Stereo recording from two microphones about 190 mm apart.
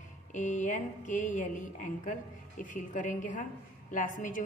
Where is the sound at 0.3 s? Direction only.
40° left (ahead or behind).